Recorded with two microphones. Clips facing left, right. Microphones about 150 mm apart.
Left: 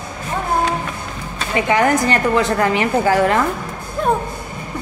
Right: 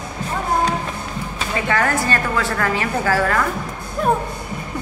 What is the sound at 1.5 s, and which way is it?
A woman's voice, 15° left (ahead or behind).